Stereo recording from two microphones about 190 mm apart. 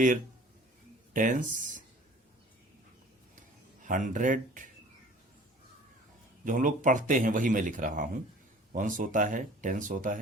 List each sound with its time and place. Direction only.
1.1 s speech: 45° right (ahead or behind)
3.8 s speech: 45° right (ahead or behind)
6.4 s speech: 45° right (ahead or behind)